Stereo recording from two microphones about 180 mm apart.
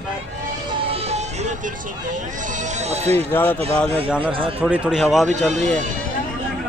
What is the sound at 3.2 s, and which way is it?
Speech, 10° left (ahead or behind).